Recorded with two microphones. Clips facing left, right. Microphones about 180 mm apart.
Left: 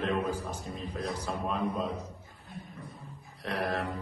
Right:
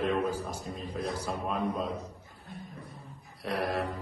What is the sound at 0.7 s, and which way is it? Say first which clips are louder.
A man's voice: right 1 dB; centre (ahead or behind).